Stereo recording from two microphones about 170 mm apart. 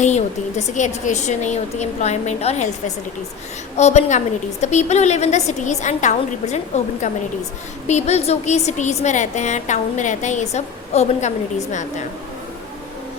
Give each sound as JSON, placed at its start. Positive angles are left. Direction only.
{"t": 0.0, "sound": "a woman's voice", "side_deg": 40}